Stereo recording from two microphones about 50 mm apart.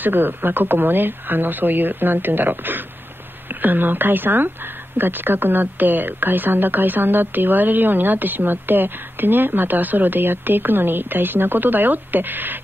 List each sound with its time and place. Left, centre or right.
0.0 s a woman's voice: right